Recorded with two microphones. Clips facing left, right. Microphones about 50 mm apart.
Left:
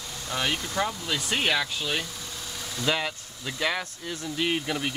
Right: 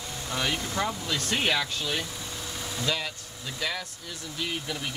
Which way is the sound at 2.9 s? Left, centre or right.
Left.